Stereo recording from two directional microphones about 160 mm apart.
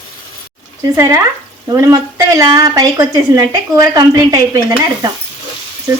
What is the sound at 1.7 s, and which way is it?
A woman's voice, 20° right (ahead or behind).